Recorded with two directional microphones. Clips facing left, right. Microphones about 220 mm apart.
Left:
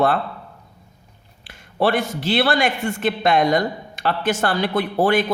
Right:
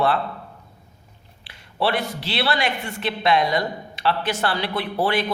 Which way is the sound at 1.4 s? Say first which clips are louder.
Left 4 dB; 45° left (ahead or behind).